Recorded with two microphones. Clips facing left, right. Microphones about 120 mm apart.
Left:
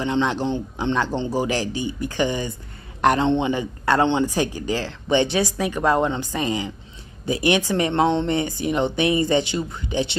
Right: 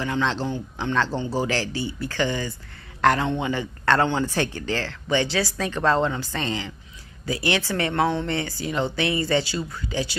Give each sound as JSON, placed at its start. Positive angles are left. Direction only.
{"t": 0.0, "sound": "a woman's voice", "side_deg": 20}